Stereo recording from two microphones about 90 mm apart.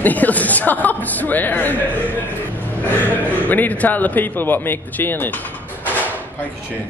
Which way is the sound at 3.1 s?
20° left (ahead or behind).